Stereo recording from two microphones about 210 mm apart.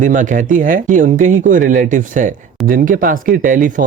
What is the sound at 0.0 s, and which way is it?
Speech, 35° right (ahead or behind).